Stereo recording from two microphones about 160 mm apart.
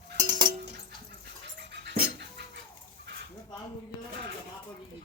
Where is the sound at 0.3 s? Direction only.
30° right (ahead or behind).